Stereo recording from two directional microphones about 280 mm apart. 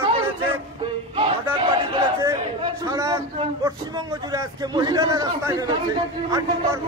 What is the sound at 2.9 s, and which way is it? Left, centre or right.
Speech, centre.